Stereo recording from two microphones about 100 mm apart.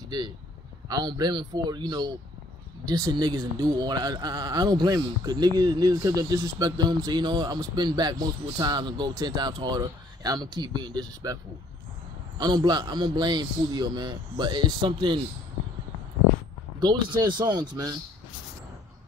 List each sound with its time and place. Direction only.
0.1 s speech: 45° right (ahead or behind)
12.4 s speech: 45° right (ahead or behind)
16.8 s speech: 45° right (ahead or behind)